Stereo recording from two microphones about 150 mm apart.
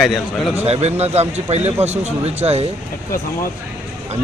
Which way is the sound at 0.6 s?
45° right (ahead or behind).